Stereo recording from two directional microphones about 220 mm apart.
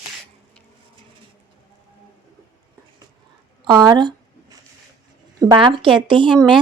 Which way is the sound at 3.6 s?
20° right (ahead or behind).